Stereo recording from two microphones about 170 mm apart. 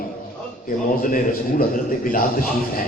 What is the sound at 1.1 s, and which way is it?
A man's voice, 55° left (ahead or behind).